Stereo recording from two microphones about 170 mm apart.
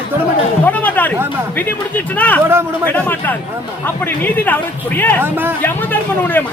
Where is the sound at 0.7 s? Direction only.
10° left (ahead or behind).